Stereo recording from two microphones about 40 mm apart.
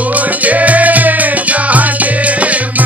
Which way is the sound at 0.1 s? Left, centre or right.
Right.